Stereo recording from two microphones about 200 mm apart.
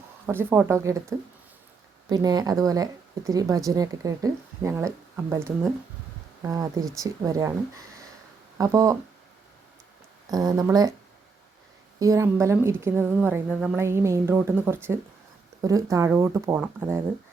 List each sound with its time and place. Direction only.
0.3 s speech: 10° right (ahead or behind)
2.0 s speech: 20° right (ahead or behind)
10.3 s speech: 20° right (ahead or behind)
11.9 s speech: 15° right (ahead or behind)